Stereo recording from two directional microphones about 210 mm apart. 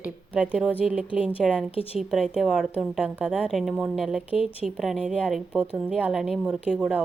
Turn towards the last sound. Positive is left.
turn(degrees=-5)  # may be behind; listen again after turning